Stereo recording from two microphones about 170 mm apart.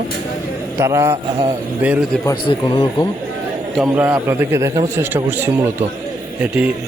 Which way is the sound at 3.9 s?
15° right (ahead or behind).